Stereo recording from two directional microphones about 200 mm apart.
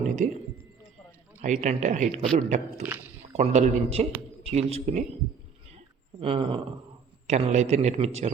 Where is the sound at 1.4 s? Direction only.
40° right (ahead or behind).